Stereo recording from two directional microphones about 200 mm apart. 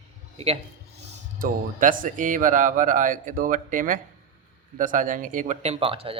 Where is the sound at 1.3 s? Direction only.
45° right (ahead or behind); by 6.2 s 30° right (ahead or behind).